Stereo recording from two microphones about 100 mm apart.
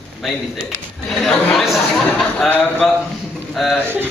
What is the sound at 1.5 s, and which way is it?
Chatter, centre (ahead or behind).